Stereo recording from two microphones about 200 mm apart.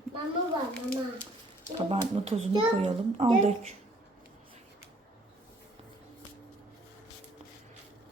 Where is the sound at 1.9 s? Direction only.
30° right (ahead or behind).